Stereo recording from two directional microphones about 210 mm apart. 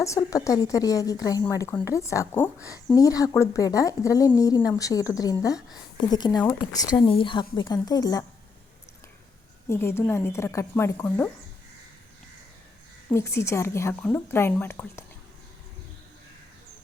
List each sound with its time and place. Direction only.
0.0 s speech: 15° left (ahead or behind)
6.4 s speech: 10° left (ahead or behind)
7.0 s speech: 25° left (ahead or behind)
9.6 s speech: 10° left (ahead or behind)
13.1 s speech: 10° left (ahead or behind)